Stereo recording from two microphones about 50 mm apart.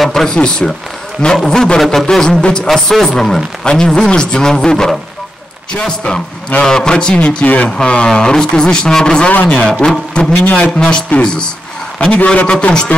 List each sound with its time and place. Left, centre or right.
0.0 s speech: centre
7.2 s speech: left
9.3 s a man's voice: left
9.6 s speech: centre
10.4 s speech: left
10.8 s speech: centre